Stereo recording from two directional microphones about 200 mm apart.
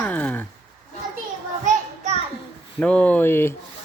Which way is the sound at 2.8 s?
5° left (ahead or behind).